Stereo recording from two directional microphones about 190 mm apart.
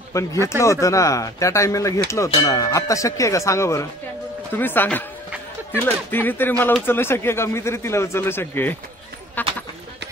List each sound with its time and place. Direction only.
0.1 s speech: 15° left (ahead or behind)